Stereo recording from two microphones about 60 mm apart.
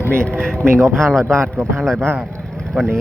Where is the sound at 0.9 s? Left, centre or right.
Centre.